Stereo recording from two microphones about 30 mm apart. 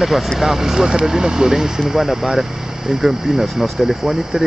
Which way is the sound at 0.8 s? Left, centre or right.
Right.